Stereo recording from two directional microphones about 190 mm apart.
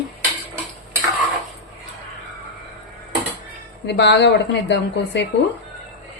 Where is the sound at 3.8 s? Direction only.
65° left (ahead or behind).